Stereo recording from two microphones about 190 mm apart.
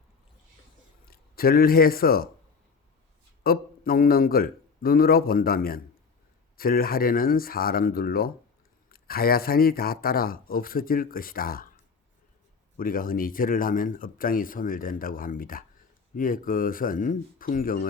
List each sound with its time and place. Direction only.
1.0 s speech: 50° left (ahead or behind)
3.4 s speech: 50° left (ahead or behind)
12.7 s speech: 50° left (ahead or behind)